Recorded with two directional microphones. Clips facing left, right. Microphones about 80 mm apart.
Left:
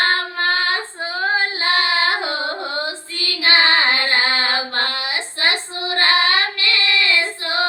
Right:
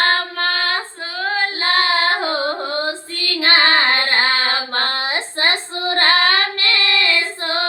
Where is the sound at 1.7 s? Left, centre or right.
Right.